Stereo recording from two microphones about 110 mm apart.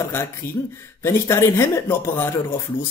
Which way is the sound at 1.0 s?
25° left (ahead or behind).